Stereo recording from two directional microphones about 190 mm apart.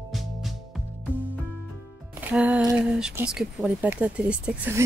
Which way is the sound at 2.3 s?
5° right (ahead or behind).